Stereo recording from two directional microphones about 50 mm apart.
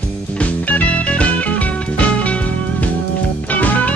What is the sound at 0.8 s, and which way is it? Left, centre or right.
Music, left.